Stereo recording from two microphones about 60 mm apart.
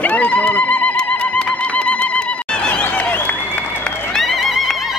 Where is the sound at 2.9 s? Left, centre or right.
Left.